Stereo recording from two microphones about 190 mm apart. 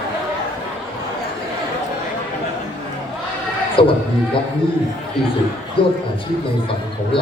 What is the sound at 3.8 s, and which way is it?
Speech, 30° left (ahead or behind).